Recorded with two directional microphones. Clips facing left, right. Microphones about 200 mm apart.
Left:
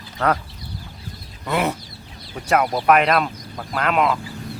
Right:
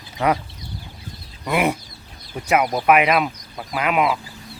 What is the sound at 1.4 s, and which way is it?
Speech, 15° right (ahead or behind).